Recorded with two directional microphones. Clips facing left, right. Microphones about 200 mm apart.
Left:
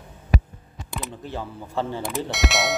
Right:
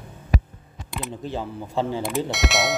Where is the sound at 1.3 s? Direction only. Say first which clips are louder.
Right 2 dB; 15° right (ahead or behind).